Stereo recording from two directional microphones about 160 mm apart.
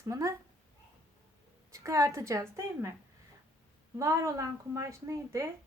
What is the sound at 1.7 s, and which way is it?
A woman's voice, 20° right (ahead or behind).